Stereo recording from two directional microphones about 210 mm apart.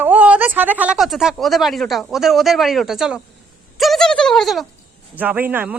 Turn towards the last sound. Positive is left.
turn(degrees=-10)  # may be behind; listen again after turning